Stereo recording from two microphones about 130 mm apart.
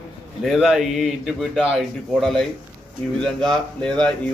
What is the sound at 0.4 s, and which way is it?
A man's voice, centre (ahead or behind).